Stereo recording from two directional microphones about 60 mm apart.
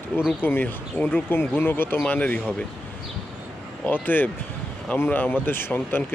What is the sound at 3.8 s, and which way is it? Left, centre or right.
Speech, left.